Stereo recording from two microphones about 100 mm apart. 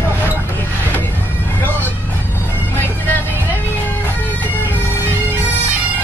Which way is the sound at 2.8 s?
15° left (ahead or behind).